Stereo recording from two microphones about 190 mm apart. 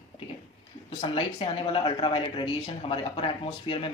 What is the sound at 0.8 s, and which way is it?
Speech, 30° left (ahead or behind).